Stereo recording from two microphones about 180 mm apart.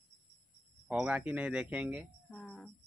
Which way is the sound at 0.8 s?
5° right (ahead or behind).